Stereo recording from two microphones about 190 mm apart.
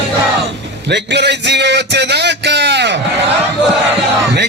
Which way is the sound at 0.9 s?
65° right (ahead or behind).